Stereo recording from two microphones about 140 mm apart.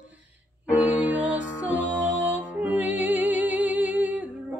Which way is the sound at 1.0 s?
10° right (ahead or behind).